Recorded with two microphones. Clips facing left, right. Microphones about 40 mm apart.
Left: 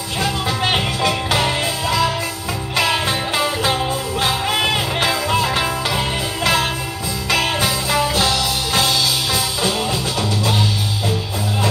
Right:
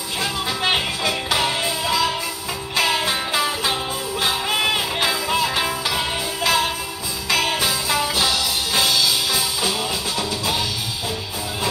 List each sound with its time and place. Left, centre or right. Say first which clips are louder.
1.3 s music: left 2 dB; left
2.9 s music: left 2 dB; centre
4.6 s music: left 2 dB; centre
5.4 s music: left 2 dB; centre
7.3 s music: left 2 dB; left